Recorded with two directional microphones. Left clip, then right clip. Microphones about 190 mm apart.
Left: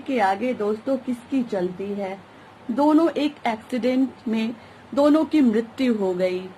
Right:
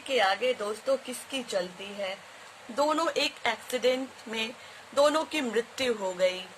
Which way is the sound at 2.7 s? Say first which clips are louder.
Left 7 dB; 30° right (ahead or behind).